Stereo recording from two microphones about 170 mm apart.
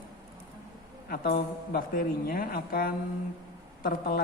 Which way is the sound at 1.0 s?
60° left (ahead or behind).